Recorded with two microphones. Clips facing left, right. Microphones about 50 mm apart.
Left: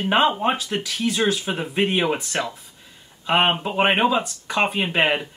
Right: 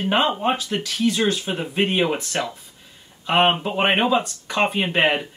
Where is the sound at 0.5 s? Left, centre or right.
Centre.